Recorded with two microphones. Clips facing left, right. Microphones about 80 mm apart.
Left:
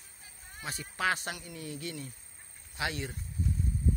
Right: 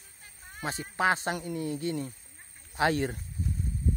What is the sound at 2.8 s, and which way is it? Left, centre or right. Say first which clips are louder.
Speech: right 9 dB; right.